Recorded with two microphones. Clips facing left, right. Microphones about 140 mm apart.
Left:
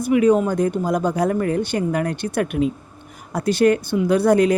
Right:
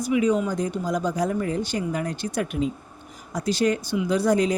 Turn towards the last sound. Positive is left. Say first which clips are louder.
# left 5 dB
turn(degrees=60)  # may be behind; listen again after turning